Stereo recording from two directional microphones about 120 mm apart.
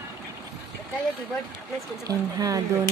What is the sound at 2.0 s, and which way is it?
Speech, 30° right (ahead or behind).